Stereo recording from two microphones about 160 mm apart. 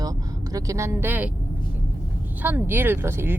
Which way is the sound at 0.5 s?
20° right (ahead or behind).